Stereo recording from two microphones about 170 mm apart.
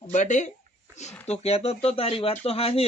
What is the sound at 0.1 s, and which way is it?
A man's voice, 45° left (ahead or behind).